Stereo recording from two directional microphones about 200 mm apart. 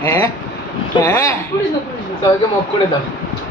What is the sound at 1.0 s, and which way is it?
Speech, 15° left (ahead or behind).